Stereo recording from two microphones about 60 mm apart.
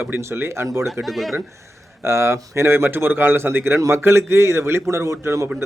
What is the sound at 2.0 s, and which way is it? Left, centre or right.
A man's voice, right.